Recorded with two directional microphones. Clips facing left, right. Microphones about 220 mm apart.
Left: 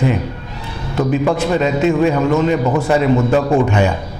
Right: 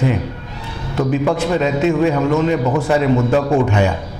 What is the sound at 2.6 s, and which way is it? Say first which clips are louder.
Speech: left 1 dB; 30° left (ahead or behind).